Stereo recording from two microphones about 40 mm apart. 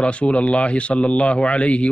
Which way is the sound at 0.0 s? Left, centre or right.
Left.